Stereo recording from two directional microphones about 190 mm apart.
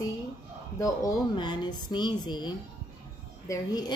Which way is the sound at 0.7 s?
15° left (ahead or behind).